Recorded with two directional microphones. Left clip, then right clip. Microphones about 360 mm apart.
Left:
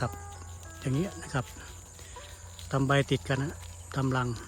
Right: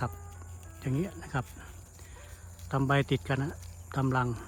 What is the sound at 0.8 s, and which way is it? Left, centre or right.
Speech, centre.